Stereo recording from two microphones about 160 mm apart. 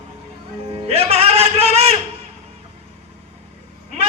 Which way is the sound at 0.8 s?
40° right (ahead or behind).